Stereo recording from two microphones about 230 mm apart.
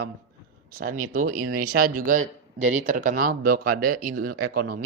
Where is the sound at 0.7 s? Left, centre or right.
Right.